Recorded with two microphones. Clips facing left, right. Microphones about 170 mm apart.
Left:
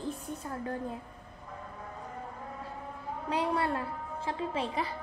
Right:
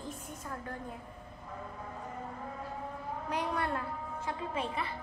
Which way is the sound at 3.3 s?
30° left (ahead or behind).